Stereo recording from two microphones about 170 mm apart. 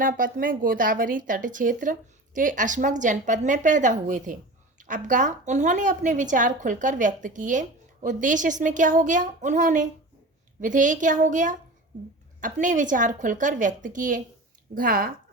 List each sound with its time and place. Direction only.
0.0 s speech: 55° right (ahead or behind)